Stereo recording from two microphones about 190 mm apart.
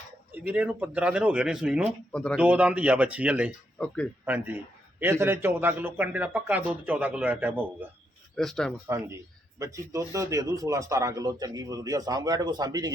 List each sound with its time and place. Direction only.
0.3 s speech: 10° right (ahead or behind)
2.1 s speech: 5° left (ahead or behind)
2.4 s speech: 5° right (ahead or behind)
8.4 s speech: 5° left (ahead or behind)
8.9 s speech: 15° right (ahead or behind)